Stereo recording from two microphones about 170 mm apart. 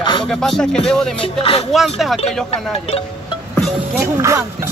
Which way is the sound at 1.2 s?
35° left (ahead or behind).